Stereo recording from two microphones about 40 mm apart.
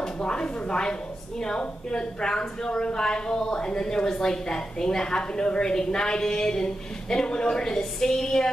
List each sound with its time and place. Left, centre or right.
0.0 s a woman's voice: left